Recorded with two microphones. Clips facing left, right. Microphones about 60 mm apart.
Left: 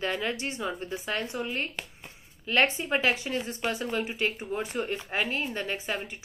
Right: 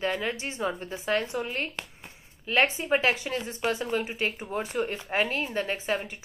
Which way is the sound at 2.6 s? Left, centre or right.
Right.